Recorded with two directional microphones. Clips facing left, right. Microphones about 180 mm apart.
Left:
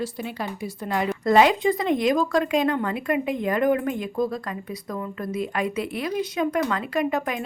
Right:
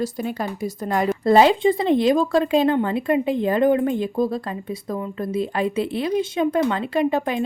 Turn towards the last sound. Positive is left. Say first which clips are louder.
# right 4 dB
turn(degrees=-30)  # may be behind; listen again after turning